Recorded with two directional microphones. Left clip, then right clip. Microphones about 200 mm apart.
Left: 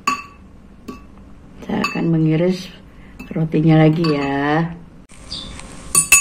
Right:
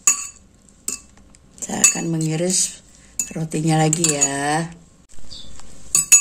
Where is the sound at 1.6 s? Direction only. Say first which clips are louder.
Right 1 dB; 70° right (ahead or behind).